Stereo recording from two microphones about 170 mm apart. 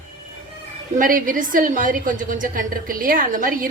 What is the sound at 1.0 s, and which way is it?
A woman's voice, 55° right (ahead or behind).